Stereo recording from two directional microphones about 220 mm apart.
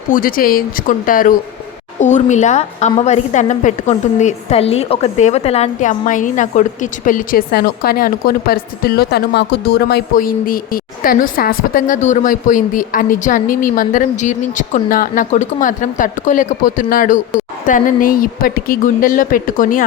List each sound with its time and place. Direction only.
0.1 s a woman's voice: 40° left (ahead or behind)